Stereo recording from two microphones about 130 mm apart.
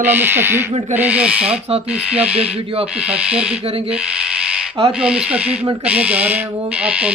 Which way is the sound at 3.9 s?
5° right (ahead or behind).